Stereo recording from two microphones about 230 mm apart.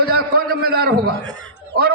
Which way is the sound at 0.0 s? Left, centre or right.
Right.